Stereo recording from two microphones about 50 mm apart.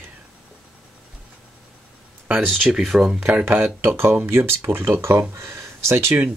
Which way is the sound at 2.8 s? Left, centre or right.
Centre.